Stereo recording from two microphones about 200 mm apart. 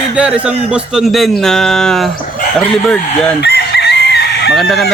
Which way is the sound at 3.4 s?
55° left (ahead or behind).